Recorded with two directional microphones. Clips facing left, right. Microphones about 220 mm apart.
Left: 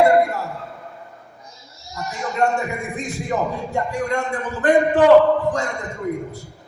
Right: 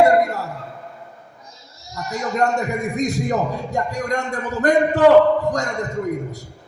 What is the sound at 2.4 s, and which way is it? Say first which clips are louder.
A man's voice: even; 40° right (ahead or behind).